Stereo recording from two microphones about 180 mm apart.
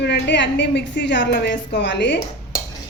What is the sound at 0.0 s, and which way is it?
A woman's voice, 75° left (ahead or behind).